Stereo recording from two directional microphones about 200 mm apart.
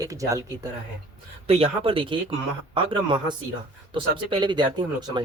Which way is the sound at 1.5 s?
30° right (ahead or behind).